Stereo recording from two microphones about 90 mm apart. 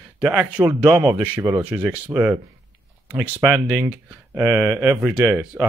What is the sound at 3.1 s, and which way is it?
Speech, 20° right (ahead or behind).